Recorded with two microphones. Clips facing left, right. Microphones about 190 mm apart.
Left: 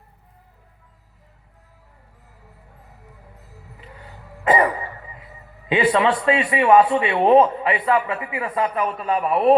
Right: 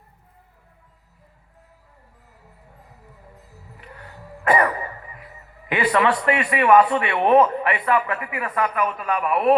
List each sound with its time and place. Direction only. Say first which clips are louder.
4.4 s cough: left 1 dB; 20° left (ahead or behind)
5.6 s a man's voice: left 2 dB; 20° left (ahead or behind)